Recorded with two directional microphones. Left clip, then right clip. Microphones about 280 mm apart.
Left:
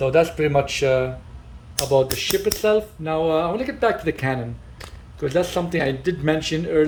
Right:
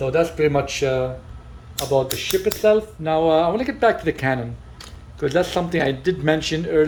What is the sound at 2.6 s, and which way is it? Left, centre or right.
A man's voice, centre.